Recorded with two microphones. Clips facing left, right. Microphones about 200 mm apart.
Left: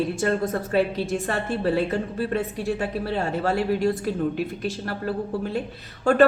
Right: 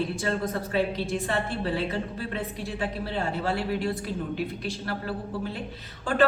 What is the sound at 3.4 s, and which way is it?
A woman's voice, 45° left (ahead or behind).